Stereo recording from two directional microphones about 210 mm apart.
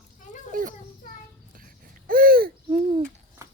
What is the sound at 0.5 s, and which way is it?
Children playing, 40° right (ahead or behind).